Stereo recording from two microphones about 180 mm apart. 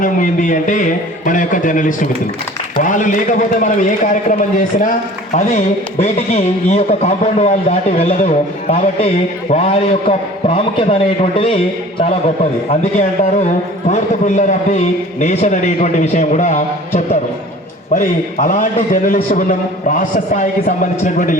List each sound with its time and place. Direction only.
0.0 s a man's voice: 45° left (ahead or behind)
6.0 s a man's voice: 40° left (ahead or behind)
9.5 s a man's voice: 35° left (ahead or behind)